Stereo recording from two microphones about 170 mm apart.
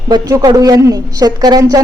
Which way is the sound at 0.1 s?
25° right (ahead or behind).